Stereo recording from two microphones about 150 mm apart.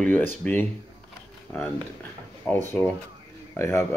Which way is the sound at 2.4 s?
15° left (ahead or behind).